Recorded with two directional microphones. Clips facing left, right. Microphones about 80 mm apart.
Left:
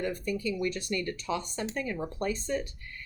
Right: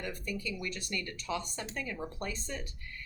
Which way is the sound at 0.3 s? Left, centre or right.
Left.